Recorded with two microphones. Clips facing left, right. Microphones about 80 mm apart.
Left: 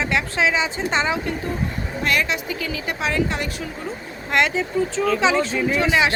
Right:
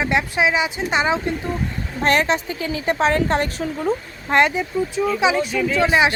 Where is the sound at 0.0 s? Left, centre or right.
Right.